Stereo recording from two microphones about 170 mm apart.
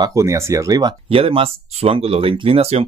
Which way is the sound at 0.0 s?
20° right (ahead or behind).